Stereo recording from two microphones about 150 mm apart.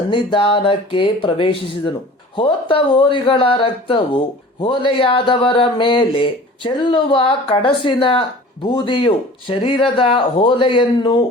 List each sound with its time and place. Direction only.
0.1 s speech: 35° left (ahead or behind)